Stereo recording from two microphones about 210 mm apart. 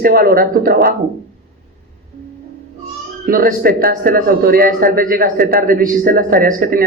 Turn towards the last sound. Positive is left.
turn(degrees=-45)  # may be behind; listen again after turning